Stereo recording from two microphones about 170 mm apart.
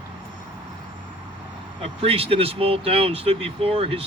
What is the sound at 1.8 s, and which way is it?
Speech, 35° right (ahead or behind).